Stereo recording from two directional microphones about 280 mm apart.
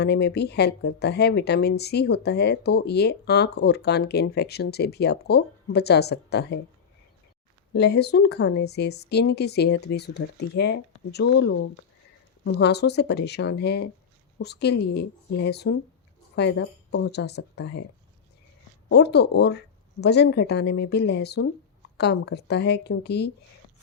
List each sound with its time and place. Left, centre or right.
0.0 s speech: left
7.8 s speech: left
18.9 s speech: left